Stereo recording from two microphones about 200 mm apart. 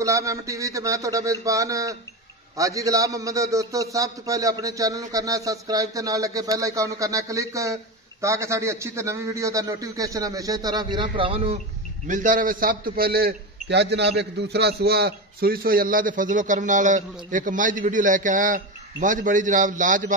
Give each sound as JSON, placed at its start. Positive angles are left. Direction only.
{"t": 0.0, "sound": "a man's voice", "side_deg": -15}
{"t": 12.1, "sound": "a man's voice", "side_deg": -40}